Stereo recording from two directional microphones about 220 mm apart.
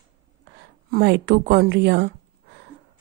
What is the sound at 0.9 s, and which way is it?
A woman's voice, 45° right (ahead or behind).